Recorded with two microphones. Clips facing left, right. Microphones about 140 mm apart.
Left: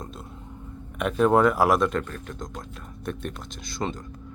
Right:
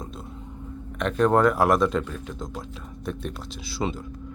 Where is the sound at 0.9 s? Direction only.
5° left (ahead or behind).